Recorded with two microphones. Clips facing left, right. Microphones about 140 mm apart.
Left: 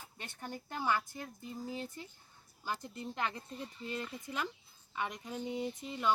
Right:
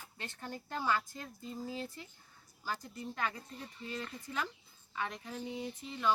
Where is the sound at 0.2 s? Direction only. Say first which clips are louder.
Even; 15° left (ahead or behind).